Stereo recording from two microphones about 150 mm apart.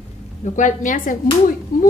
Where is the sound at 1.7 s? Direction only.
75° left (ahead or behind).